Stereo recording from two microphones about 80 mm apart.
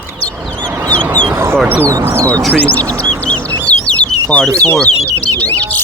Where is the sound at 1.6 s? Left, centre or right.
Right.